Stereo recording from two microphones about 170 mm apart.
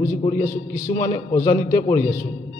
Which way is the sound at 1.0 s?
15° left (ahead or behind).